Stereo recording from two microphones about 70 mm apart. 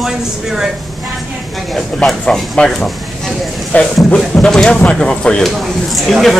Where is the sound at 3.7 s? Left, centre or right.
Left.